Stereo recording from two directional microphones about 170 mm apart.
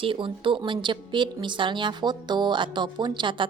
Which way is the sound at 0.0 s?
30° right (ahead or behind).